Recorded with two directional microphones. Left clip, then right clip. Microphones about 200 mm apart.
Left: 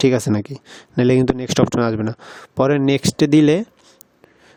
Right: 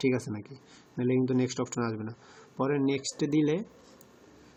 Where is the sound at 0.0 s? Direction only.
60° left (ahead or behind).